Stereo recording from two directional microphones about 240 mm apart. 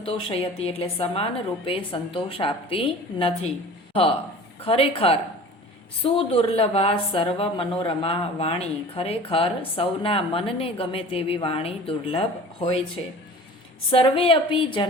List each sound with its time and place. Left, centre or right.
0.0 s a woman's voice: left
4.6 s a woman's voice: left
13.9 s a woman's voice: left